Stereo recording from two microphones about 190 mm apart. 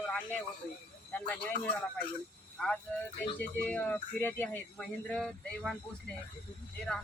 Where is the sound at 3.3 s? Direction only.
10° left (ahead or behind).